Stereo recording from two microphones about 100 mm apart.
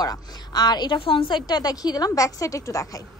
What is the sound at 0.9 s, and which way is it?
A woman's voice, 60° left (ahead or behind).